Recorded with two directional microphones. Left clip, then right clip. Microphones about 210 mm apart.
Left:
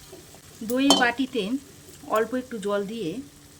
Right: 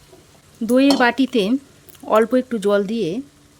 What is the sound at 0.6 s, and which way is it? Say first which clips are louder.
Speech: right 6 dB; 50° right (ahead or behind).